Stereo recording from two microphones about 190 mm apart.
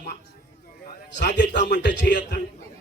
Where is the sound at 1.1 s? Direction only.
65° left (ahead or behind).